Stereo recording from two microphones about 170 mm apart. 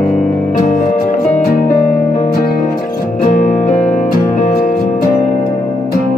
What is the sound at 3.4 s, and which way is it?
Music, 45° left (ahead or behind).